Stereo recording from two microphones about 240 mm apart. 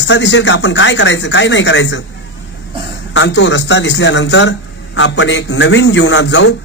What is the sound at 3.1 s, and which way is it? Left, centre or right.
Speech, left.